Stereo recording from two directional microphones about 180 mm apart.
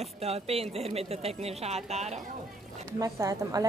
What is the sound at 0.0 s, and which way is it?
A woman's voice, 35° right (ahead or behind).